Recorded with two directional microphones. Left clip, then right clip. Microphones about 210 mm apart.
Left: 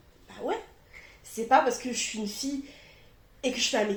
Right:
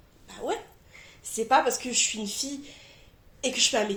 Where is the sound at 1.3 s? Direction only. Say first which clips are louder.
Even; 40° right (ahead or behind).